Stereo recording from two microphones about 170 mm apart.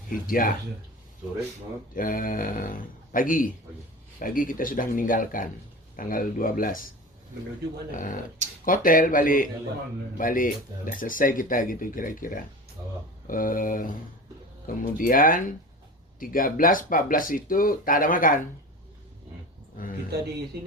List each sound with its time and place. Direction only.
0.1 s speech: 55° left (ahead or behind)
2.0 s speech: 55° left (ahead or behind)
7.9 s speech: 50° left (ahead or behind)
14.9 s speech: 55° left (ahead or behind)
20.1 s mantra: 70° right (ahead or behind)
20.5 s speech: 75° right (ahead or behind)